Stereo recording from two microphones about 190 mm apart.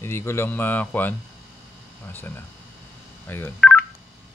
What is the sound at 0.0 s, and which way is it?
Speech, 15° left (ahead or behind).